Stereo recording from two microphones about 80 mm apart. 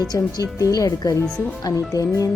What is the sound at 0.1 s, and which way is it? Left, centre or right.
Speech, left.